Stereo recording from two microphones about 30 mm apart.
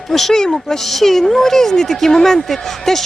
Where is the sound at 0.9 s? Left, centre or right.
Centre.